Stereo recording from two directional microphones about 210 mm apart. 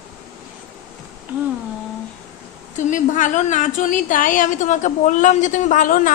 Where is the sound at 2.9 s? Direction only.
35° left (ahead or behind).